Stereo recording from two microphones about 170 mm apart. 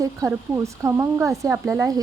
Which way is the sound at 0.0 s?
20° right (ahead or behind).